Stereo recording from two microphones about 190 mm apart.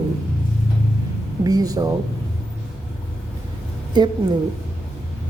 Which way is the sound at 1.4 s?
20° right (ahead or behind).